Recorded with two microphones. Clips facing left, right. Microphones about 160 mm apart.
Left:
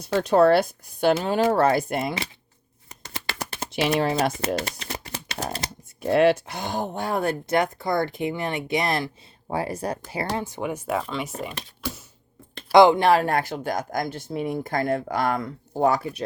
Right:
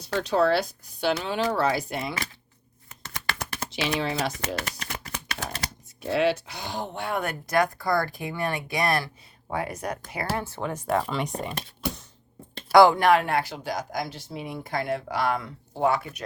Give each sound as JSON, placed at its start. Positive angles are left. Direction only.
{"t": 0.0, "sound": "speech", "side_deg": 50}
{"t": 3.7, "sound": "speech", "side_deg": 50}
{"t": 4.3, "sound": "speech", "side_deg": 30}
{"t": 6.0, "sound": "speech", "side_deg": 50}
{"t": 10.3, "sound": "speech", "side_deg": 15}
{"t": 12.7, "sound": "speech", "side_deg": 20}